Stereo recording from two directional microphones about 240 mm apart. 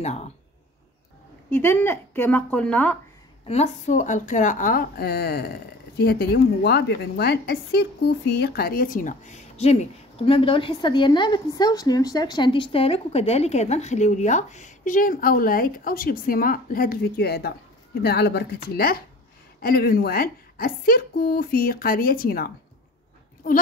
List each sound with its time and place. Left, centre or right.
0.0 s speech: left
1.5 s a woman's voice: centre
3.4 s a woman's voice: left